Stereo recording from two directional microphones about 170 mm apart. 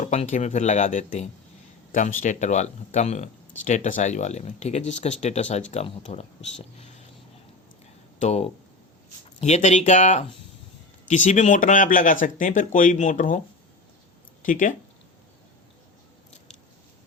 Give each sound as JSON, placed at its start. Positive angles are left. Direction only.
{"t": 0.1, "sound": "speech", "side_deg": 45}
{"t": 8.2, "sound": "speech", "side_deg": 40}
{"t": 14.4, "sound": "speech", "side_deg": 50}